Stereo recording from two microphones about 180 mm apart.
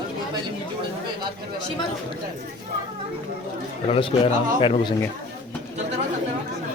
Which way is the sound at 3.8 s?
35° left (ahead or behind).